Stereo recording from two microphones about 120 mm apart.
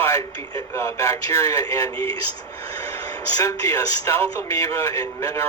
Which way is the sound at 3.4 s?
25° left (ahead or behind).